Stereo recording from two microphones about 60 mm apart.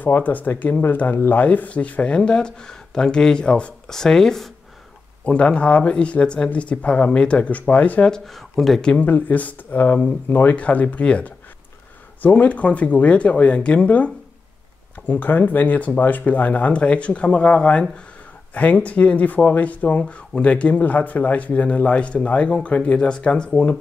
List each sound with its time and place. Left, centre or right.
0.0 s speech: left; by 4.5 s centre
5.2 s speech: centre
8.1 s speech: centre
9.0 s speech: left